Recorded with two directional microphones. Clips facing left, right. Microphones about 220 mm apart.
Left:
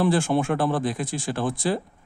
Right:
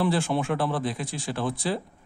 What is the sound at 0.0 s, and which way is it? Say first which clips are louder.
Speech: left 3 dB; 45° left (ahead or behind).